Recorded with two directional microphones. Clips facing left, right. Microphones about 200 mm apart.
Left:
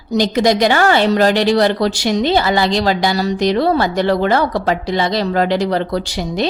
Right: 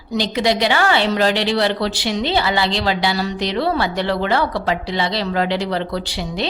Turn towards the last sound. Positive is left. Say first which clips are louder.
# left 5 dB
turn(degrees=45)  # may be behind; listen again after turning